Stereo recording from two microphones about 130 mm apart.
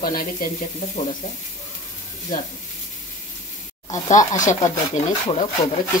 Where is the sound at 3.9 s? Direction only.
70° left (ahead or behind).